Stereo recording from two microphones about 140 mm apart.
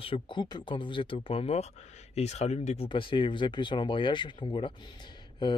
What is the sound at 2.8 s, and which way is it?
Speech, 35° left (ahead or behind).